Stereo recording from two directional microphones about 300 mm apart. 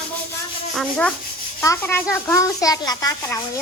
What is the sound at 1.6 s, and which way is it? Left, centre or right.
A child's voice, centre.